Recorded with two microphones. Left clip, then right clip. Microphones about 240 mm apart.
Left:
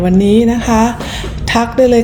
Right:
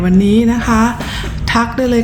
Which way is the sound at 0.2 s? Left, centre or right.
Centre.